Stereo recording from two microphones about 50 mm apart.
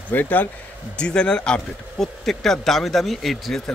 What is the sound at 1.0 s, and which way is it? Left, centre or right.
Speech, centre.